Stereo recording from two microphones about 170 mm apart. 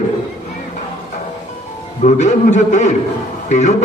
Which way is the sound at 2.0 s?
45° left (ahead or behind).